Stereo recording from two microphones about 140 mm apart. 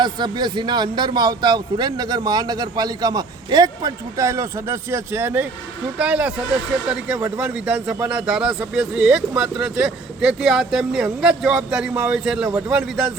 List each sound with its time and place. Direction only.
0.0 s a man's voice: 30° right (ahead or behind); by 13.1 s 5° right (ahead or behind)